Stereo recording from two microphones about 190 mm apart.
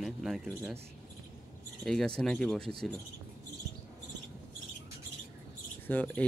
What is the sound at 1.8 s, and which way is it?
Speech, 5° left (ahead or behind).